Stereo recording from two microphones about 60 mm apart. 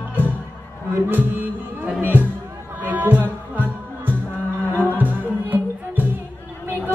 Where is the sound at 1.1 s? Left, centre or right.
Right.